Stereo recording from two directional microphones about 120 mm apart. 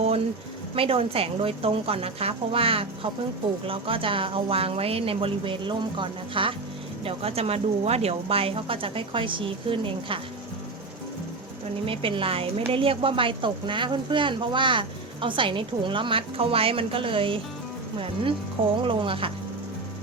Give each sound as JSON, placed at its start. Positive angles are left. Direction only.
{"t": 0.8, "sound": "a woman's voice", "side_deg": -50}
{"t": 7.0, "sound": "a woman's voice", "side_deg": -55}
{"t": 11.9, "sound": "a woman's voice", "side_deg": -50}
{"t": 18.9, "sound": "a woman's voice", "side_deg": -45}